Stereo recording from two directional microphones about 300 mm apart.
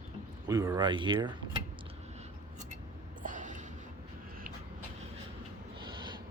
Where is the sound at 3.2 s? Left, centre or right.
Right.